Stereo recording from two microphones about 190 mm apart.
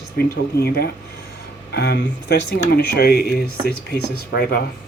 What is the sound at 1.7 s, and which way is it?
Speech, 60° left (ahead or behind).